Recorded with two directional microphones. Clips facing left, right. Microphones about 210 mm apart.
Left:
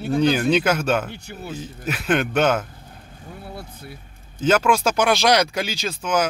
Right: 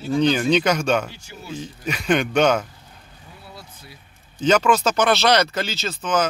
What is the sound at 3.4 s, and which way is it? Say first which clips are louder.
Vehicle: left 6 dB; 55° left (ahead or behind).